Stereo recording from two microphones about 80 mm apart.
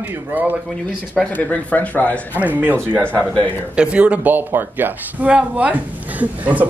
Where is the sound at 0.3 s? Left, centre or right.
Right.